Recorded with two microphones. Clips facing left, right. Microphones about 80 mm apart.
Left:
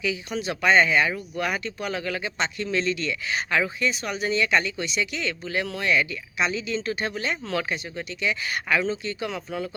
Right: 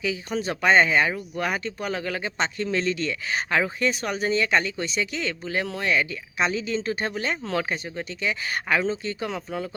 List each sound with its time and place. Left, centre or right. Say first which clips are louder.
0.0 s speech: right 1 dB; right